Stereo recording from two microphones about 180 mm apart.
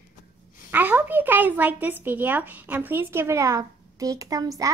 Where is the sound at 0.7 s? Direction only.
10° right (ahead or behind).